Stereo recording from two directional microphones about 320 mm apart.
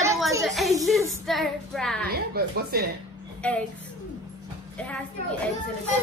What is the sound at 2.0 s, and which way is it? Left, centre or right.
Speech, right.